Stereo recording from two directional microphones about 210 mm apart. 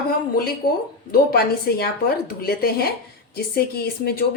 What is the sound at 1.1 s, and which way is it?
Speech, 45° left (ahead or behind).